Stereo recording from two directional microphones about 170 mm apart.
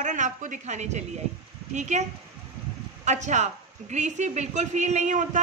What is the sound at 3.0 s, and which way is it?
A woman's voice, 45° right (ahead or behind).